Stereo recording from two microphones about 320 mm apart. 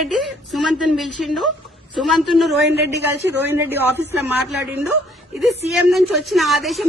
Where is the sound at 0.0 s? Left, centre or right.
Centre.